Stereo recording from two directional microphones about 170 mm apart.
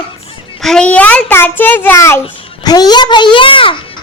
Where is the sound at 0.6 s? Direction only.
5° left (ahead or behind).